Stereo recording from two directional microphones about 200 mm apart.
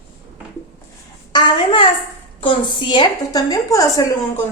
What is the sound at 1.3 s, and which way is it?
A child's voice, 20° left (ahead or behind).